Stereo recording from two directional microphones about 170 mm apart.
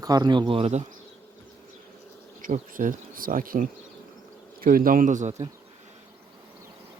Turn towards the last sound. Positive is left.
turn(degrees=-45)  # may be behind; listen again after turning